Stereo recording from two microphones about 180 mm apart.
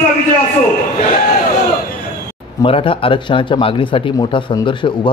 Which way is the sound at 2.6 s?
30° left (ahead or behind).